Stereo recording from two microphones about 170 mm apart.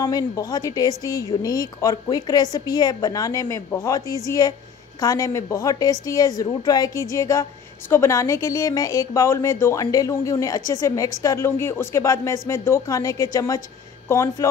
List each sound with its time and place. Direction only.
0.0 s a woman's voice: 20° left (ahead or behind)